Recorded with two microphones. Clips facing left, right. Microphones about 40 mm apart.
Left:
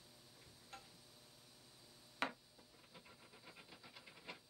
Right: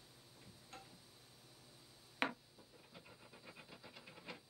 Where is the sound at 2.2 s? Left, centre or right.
Right.